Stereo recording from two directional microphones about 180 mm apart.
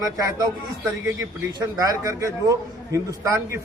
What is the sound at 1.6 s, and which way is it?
A man's voice, 20° right (ahead or behind).